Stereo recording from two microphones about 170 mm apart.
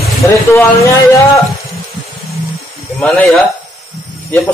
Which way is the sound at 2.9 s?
5° left (ahead or behind).